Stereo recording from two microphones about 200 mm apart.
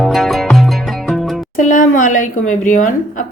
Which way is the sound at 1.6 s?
40° left (ahead or behind).